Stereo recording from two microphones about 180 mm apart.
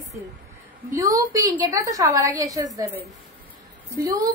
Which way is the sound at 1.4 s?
20° right (ahead or behind).